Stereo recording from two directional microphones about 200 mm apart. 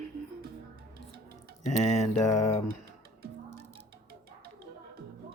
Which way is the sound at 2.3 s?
15° left (ahead or behind).